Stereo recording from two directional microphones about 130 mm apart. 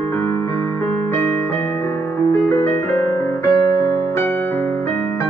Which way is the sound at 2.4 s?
20° left (ahead or behind).